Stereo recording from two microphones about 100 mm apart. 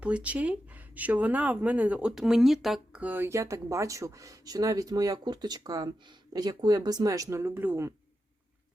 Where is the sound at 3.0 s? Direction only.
20° right (ahead or behind).